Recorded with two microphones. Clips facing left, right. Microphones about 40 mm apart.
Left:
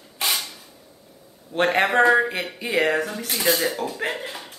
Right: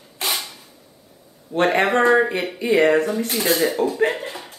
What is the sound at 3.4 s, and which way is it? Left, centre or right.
Speech, centre.